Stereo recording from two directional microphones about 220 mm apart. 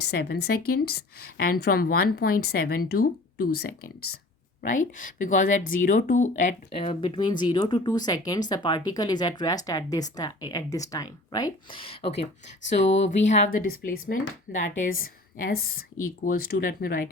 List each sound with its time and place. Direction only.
0.0 s a woman's voice: 45° left (ahead or behind)
4.6 s speech: 35° left (ahead or behind)